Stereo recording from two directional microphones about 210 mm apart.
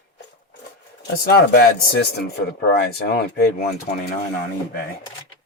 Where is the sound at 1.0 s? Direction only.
50° left (ahead or behind).